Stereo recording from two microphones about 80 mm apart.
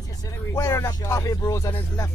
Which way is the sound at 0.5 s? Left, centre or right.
Left.